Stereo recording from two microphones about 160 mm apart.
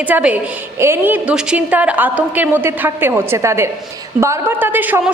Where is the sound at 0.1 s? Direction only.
10° right (ahead or behind).